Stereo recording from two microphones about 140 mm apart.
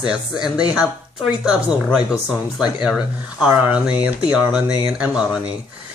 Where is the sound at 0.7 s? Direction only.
5° right (ahead or behind).